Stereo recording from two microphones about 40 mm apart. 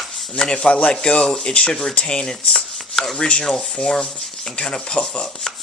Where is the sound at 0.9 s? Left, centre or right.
Centre.